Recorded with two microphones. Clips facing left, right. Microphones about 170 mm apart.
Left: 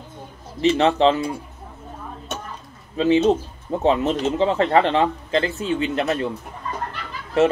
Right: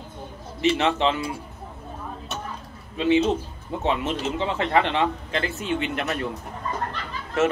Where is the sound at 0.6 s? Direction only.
35° left (ahead or behind).